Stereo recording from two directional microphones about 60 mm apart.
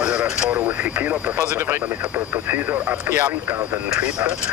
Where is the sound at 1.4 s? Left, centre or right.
Right.